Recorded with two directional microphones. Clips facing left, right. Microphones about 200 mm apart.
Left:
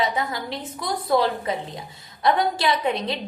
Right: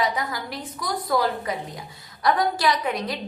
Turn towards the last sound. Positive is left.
turn(degrees=25)  # may be behind; listen again after turning